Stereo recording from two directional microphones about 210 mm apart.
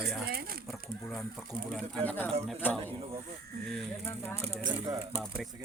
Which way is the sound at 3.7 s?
5° left (ahead or behind).